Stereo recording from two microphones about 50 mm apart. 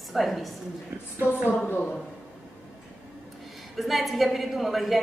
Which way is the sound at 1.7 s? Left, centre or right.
Left.